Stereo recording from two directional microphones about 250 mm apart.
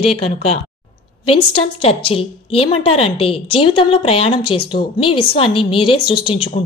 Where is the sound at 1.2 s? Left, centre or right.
Left.